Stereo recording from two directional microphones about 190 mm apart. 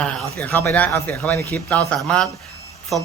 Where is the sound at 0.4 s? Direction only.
10° left (ahead or behind).